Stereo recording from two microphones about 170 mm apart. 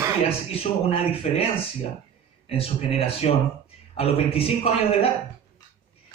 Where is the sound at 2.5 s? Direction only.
35° left (ahead or behind).